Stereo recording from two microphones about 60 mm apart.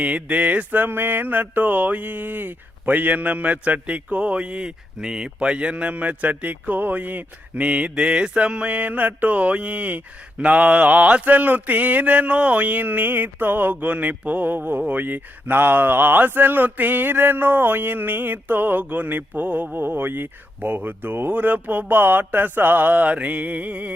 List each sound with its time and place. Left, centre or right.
0.0 s mantra: right